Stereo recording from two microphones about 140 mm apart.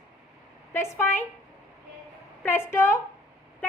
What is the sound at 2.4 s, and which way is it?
Speech, 15° left (ahead or behind).